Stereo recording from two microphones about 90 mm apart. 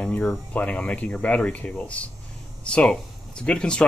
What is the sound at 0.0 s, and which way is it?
Speech, 5° left (ahead or behind).